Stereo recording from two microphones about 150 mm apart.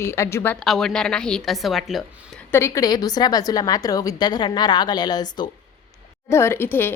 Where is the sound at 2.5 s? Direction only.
20° left (ahead or behind).